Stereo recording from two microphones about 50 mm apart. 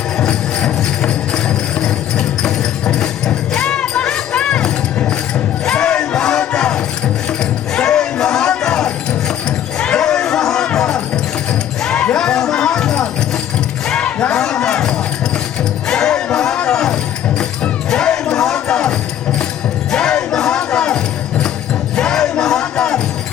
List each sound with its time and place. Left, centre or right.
0.2 s music: centre
5.6 s a sound: centre
7.8 s a sound: centre
9.7 s crowd: centre
10.8 s music: centre
11.8 s basketball bounce: centre
12.1 s music: centre
13.8 s crowd: centre
15.9 s music: centre